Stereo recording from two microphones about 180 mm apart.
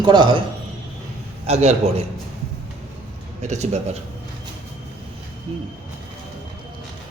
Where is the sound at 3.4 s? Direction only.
40° right (ahead or behind).